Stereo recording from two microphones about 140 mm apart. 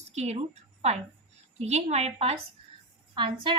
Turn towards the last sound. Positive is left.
turn(degrees=-35)  # may be behind; listen again after turning